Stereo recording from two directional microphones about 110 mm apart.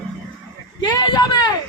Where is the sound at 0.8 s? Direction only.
40° left (ahead or behind).